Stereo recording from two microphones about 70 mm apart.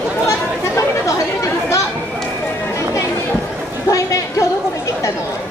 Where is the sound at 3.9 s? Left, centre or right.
Left.